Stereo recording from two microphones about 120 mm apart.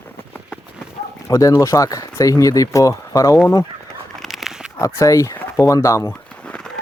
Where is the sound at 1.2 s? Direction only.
25° left (ahead or behind).